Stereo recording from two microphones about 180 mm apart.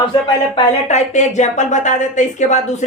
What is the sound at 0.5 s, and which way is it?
Speech, 40° left (ahead or behind).